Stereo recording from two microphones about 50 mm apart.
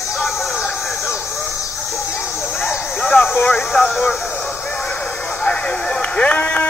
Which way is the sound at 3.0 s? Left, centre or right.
Left.